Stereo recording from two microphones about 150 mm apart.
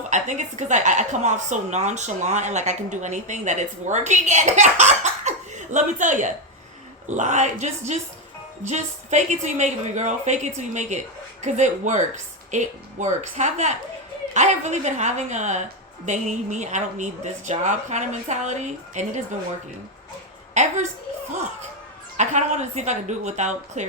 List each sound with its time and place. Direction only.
0.1 s a woman's voice: 50° right (ahead or behind)
20.5 s a woman's voice: 50° right (ahead or behind)
22.2 s a woman's voice: 50° right (ahead or behind)